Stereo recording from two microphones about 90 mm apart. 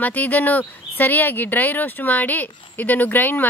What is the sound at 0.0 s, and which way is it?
Speech, 20° left (ahead or behind).